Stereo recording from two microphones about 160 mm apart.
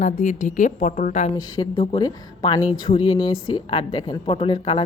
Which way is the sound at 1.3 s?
25° left (ahead or behind).